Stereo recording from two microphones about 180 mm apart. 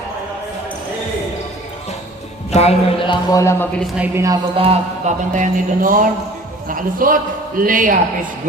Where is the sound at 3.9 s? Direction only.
10° right (ahead or behind).